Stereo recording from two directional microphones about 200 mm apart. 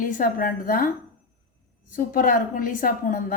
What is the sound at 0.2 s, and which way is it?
Speech, 45° left (ahead or behind).